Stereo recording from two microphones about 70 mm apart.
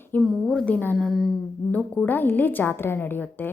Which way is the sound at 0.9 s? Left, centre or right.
Centre.